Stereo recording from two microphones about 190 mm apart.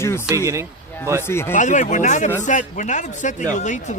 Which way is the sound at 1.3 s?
15° left (ahead or behind).